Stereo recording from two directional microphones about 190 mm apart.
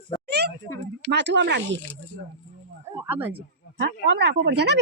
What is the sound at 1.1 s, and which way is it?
Speech, 65° right (ahead or behind).